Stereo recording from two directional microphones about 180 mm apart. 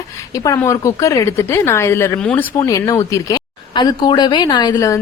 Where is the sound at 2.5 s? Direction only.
20° left (ahead or behind).